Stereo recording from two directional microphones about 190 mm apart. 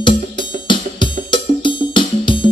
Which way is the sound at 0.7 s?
25° left (ahead or behind).